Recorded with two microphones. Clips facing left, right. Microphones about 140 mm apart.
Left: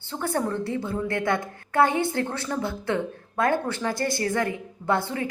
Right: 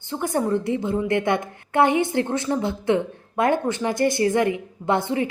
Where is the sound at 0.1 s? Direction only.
15° right (ahead or behind).